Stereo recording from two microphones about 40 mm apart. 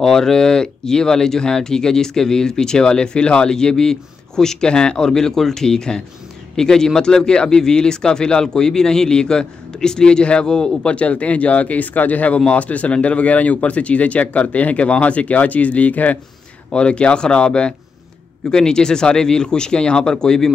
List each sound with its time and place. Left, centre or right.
0.0 s speech: centre; by 16.2 s left
16.7 s speech: left